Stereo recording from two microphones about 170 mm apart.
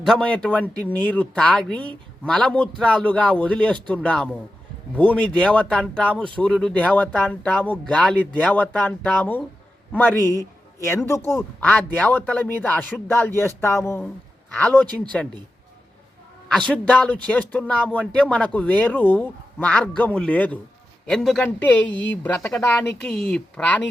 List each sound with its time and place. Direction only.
0.0 s speech: 5° left (ahead or behind)
10.8 s speech: 15° left (ahead or behind)
16.5 s speech: 5° left (ahead or behind)
21.9 s a woman's voice: 90° left
22.2 s speech: 5° left (ahead or behind)